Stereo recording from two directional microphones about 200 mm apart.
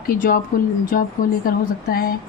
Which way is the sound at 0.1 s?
45° left (ahead or behind).